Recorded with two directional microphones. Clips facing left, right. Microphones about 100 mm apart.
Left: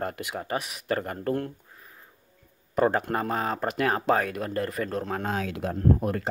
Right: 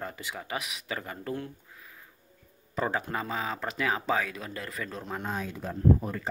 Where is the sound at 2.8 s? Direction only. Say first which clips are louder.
Left 7 dB; 55° left (ahead or behind).